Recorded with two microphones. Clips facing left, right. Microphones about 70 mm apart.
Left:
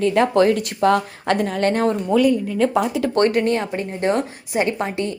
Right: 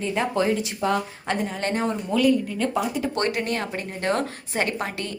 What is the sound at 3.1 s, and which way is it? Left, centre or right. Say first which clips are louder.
Speech: left 8 dB; left.